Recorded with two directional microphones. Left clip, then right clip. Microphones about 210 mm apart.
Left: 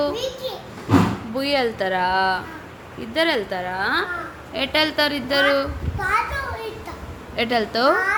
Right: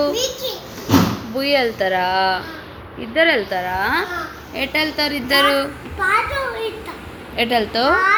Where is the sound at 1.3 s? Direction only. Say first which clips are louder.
Right 4 dB; 5° left (ahead or behind).